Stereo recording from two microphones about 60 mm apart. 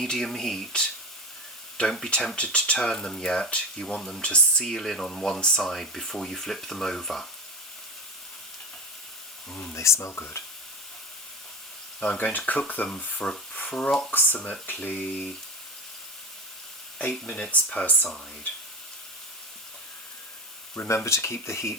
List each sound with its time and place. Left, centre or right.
0.0 s speech: centre
9.7 s speech: left
12.1 s speech: left
17.1 s speech: centre
20.7 s speech: left